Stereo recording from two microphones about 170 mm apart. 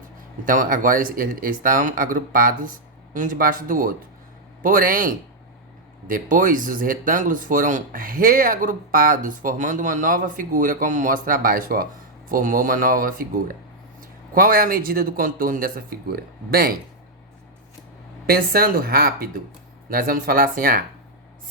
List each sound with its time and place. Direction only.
0.4 s speech: 50° right (ahead or behind)
18.3 s speech: 60° right (ahead or behind)